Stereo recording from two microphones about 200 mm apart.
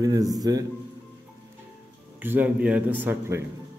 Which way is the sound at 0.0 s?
20° right (ahead or behind).